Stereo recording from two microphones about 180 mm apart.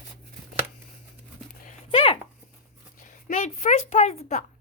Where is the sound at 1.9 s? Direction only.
30° left (ahead or behind).